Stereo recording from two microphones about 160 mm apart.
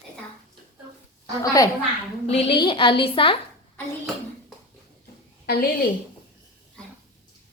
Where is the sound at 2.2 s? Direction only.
40° left (ahead or behind).